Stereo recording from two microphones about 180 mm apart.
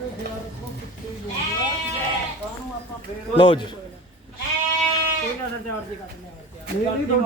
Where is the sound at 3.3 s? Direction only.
30° left (ahead or behind).